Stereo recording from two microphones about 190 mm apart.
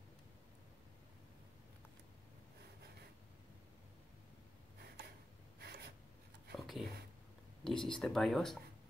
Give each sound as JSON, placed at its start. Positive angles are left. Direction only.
{"t": 5.6, "sound": "writing", "side_deg": -60}
{"t": 6.5, "sound": "a sound", "side_deg": 0}
{"t": 7.6, "sound": "speech", "side_deg": 0}